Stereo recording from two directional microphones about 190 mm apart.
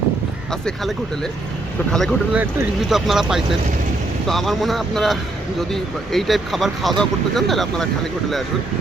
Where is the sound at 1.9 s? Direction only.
Centre (ahead or behind).